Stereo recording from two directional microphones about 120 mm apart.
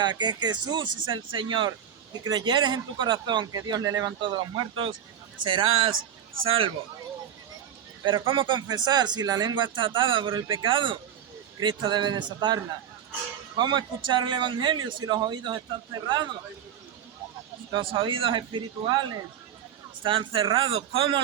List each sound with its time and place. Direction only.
0.0 s a man's voice: 40° right (ahead or behind)
4.2 s a man's voice: 45° right (ahead or behind)
6.4 s speech: 50° right (ahead or behind)
8.0 s a man's voice: 45° right (ahead or behind)
13.6 s a man's voice: 40° right (ahead or behind)
17.7 s speech: 45° right (ahead or behind)